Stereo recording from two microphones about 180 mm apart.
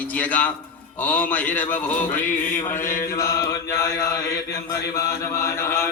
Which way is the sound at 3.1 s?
20° left (ahead or behind).